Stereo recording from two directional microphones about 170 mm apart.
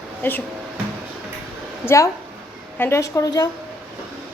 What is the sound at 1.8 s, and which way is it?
A woman's voice, 15° left (ahead or behind).